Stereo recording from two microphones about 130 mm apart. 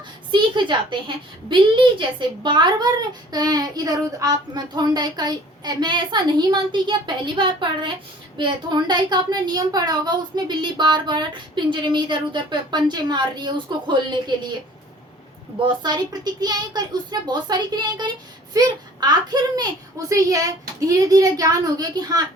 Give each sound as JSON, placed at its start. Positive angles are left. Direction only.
{"t": 0.3, "sound": "a woman's voice", "side_deg": -35}
{"t": 15.6, "sound": "a woman's voice", "side_deg": -35}